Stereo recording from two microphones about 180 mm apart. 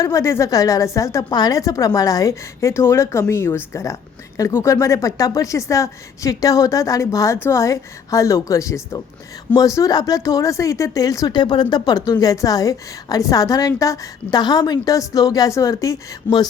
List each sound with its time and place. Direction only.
0.0 s a woman's voice: 15° left (ahead or behind)